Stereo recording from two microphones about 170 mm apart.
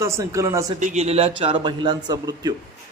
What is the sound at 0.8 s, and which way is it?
A man's voice, 40° right (ahead or behind).